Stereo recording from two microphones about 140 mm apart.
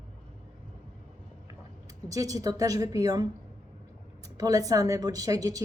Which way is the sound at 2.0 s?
25° right (ahead or behind).